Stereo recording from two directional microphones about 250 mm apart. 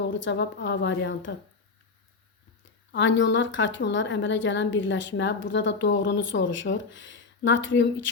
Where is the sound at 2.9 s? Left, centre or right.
Left.